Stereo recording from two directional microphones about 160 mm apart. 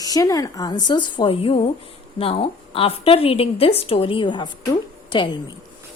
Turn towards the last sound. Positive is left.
turn(degrees=30)  # may be behind; listen again after turning